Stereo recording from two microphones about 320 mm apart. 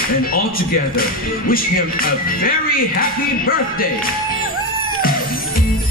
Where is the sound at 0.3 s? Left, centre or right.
Left.